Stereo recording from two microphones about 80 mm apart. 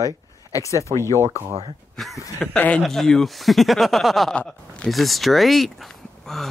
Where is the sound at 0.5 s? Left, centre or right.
Left.